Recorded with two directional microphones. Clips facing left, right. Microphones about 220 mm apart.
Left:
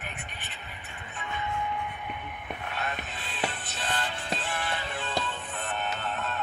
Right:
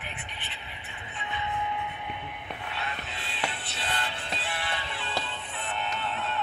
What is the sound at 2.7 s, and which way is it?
Music, 45° left (ahead or behind).